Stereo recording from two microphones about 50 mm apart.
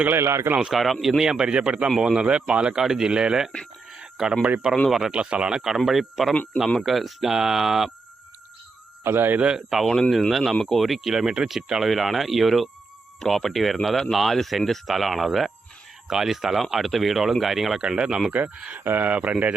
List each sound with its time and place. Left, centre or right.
0.2 s speech: right
0.7 s speech: centre
1.3 s speech: centre
3.9 s a sound: centre
4.9 s speech: centre
5.1 s speech: right
5.5 s speech: centre
9.0 s speech: right
9.4 s speech: centre
9.6 s speech: centre
17.8 s speech: centre
18.8 s speech: right
19.1 s speech: right